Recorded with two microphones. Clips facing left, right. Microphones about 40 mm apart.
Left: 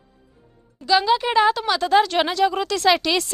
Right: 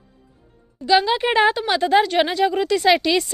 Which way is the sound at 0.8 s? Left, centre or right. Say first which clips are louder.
Right 2 dB; centre.